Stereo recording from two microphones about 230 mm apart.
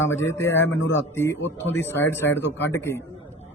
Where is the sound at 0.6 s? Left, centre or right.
Left.